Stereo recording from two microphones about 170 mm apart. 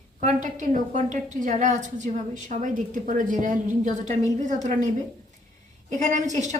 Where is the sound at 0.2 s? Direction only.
45° right (ahead or behind).